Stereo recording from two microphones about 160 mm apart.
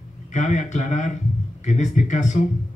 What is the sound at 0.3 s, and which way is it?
A man's voice, 50° left (ahead or behind).